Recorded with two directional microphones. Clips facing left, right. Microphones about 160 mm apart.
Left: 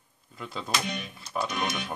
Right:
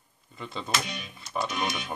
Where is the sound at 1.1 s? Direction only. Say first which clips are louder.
Right 2 dB; centre (ahead or behind).